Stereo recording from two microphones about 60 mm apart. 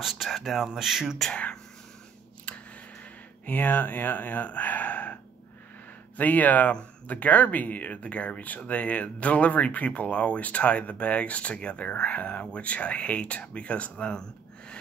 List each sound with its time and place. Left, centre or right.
0.0 s speech: centre
1.1 s speech: centre
2.5 s a sound: left
3.4 s speech: left
6.1 s speech: left
6.7 s speech: centre
7.2 s speech: left